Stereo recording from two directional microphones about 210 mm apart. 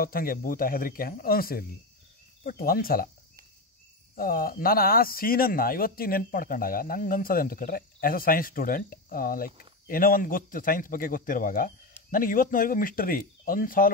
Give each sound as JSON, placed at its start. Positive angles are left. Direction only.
{"t": 0.0, "sound": "speech", "side_deg": 45}
{"t": 4.1, "sound": "a man's voice", "side_deg": 45}